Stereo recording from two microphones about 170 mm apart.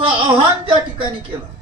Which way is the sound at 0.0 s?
30° right (ahead or behind).